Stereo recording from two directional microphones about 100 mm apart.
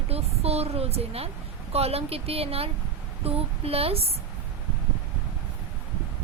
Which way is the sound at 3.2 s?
75° right (ahead or behind).